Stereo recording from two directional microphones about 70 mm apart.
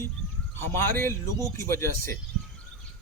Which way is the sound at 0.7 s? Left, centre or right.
Left.